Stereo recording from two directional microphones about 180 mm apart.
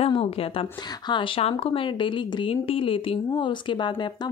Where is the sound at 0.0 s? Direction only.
30° left (ahead or behind).